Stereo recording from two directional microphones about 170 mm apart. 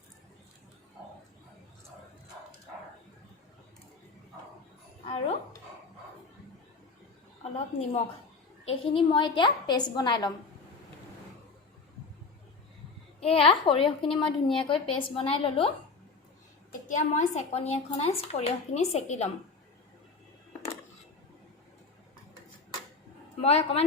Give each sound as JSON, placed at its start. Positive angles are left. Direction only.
{"t": 7.4, "sound": "a woman's voice", "side_deg": 40}
{"t": 13.1, "sound": "a woman's voice", "side_deg": 35}
{"t": 16.9, "sound": "a woman's voice", "side_deg": 45}
{"t": 23.4, "sound": "a woman's voice", "side_deg": 35}